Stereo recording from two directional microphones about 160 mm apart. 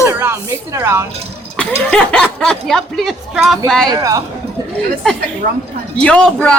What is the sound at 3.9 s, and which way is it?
Speech, 20° right (ahead or behind).